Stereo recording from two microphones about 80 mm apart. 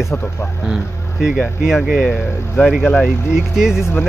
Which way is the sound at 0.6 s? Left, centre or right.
Centre.